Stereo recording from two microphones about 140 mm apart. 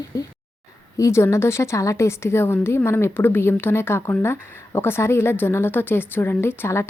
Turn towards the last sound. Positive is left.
turn(degrees=20)  # may be behind; listen again after turning